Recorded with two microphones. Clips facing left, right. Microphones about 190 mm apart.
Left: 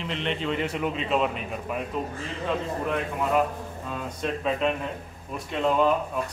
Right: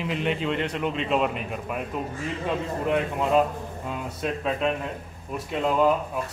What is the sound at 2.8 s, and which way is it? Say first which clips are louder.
Speech: right 6 dB; 20° right (ahead or behind).